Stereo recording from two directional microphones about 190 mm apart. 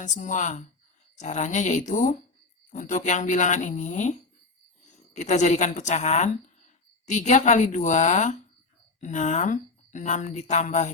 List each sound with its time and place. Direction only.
0.0 s speech: 40° left (ahead or behind)